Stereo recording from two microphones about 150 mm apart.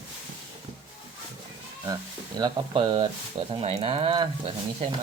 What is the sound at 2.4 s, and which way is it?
Speech, 30° right (ahead or behind).